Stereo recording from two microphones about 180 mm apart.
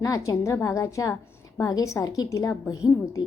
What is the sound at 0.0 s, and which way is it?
A woman's voice, 15° left (ahead or behind).